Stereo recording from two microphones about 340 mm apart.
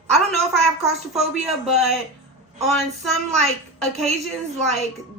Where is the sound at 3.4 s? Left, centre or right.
Centre.